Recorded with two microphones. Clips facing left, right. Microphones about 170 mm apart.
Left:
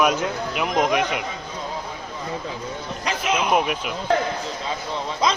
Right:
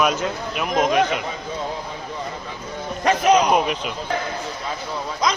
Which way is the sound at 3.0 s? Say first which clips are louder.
Right 9 dB; 45° right (ahead or behind).